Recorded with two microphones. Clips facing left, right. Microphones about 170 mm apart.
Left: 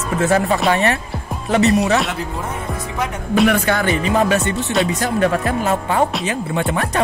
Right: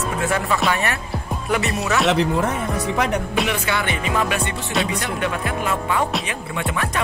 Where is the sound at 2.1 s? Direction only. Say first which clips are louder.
Right 6 dB; 75° right (ahead or behind).